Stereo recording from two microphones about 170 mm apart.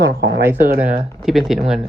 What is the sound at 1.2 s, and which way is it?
Speech, centre (ahead or behind).